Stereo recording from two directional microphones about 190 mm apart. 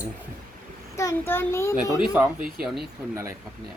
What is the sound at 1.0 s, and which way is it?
Speech, 15° left (ahead or behind).